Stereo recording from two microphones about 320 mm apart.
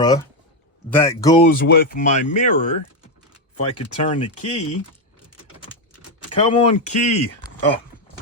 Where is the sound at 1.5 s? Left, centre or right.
Left.